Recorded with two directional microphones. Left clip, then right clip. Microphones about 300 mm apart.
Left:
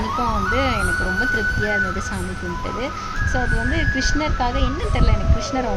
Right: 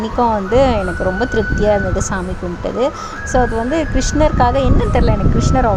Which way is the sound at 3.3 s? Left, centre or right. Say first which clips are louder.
Right 9 dB; centre.